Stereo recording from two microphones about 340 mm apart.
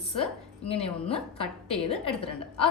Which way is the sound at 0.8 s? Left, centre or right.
Centre.